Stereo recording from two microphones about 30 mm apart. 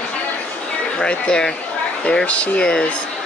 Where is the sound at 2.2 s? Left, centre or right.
Left.